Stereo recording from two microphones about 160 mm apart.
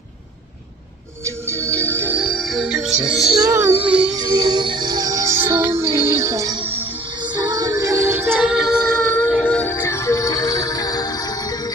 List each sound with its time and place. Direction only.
1.5 s music: 10° left (ahead or behind)
3.1 s a child's voice: centre (ahead or behind)
3.4 s a child's voice: 15° right (ahead or behind)
4.1 s music: 25° right (ahead or behind)
6.6 s music: 35° right (ahead or behind); by 8.3 s 15° right (ahead or behind)
8.3 s music: centre (ahead or behind)
9.0 s music: 10° left (ahead or behind)